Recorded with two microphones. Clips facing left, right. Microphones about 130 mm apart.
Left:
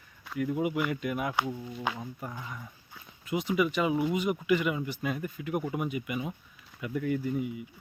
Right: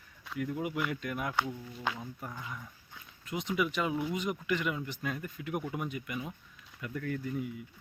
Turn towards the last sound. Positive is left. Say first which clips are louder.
# left 5 dB
turn(degrees=5)  # may be behind; listen again after turning